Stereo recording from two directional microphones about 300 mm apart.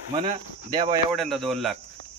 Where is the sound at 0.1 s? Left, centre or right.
Centre.